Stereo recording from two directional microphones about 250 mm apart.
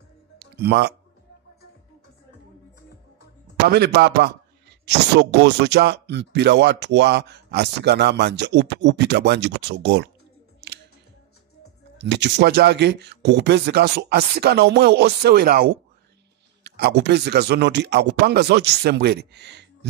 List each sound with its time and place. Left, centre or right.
0.4 s music: right
3.6 s speech: right
10.6 s music: right
12.0 s speech: right